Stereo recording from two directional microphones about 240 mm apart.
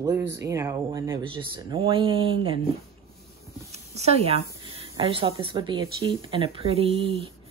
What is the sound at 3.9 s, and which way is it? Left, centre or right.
A woman's voice, right.